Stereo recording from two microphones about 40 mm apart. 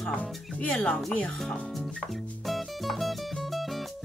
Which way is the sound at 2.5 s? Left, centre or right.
Centre.